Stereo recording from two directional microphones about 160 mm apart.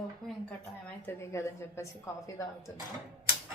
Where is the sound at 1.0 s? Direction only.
15° left (ahead or behind).